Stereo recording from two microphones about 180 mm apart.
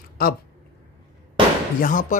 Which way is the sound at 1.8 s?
50° left (ahead or behind).